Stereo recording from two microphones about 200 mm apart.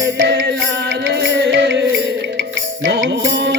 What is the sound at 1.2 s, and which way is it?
Music, 60° right (ahead or behind).